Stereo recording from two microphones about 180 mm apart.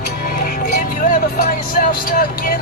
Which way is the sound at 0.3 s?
55° left (ahead or behind).